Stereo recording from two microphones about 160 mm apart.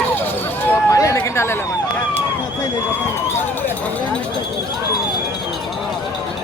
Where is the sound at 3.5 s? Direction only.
10° left (ahead or behind).